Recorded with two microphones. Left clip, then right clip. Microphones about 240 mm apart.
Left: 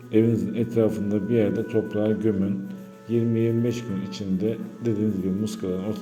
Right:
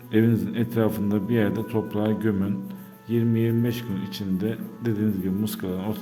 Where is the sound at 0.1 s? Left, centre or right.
Right.